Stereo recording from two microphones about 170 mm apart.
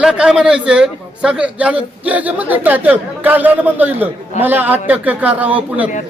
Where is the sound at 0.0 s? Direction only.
5° right (ahead or behind).